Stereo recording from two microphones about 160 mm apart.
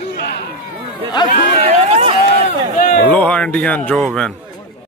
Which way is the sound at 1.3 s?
45° right (ahead or behind).